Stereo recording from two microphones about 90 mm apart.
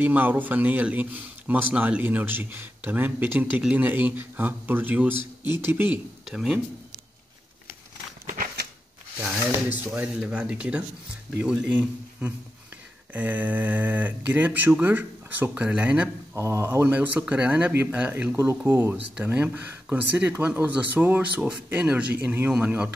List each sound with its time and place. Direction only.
0.0 s speech: 20° right (ahead or behind)
6.2 s speech: 5° right (ahead or behind)
9.2 s speech: 20° right (ahead or behind)
16.3 s speech: 30° right (ahead or behind); by 18.3 s 15° right (ahead or behind)
18.3 s speech: 30° right (ahead or behind)